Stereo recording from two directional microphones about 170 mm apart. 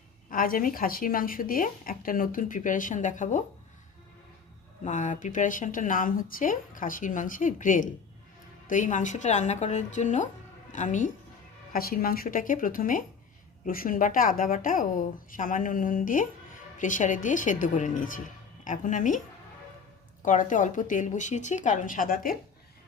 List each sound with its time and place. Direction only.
0.3 s a woman's voice: 55° left (ahead or behind)
4.9 s a woman's voice: 45° left (ahead or behind)
11.7 s a woman's voice: 60° left (ahead or behind)
20.2 s speech: 50° left (ahead or behind)